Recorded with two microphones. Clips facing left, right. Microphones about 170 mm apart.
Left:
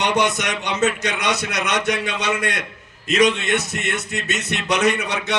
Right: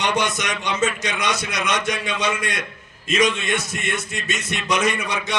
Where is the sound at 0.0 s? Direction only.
65° left (ahead or behind).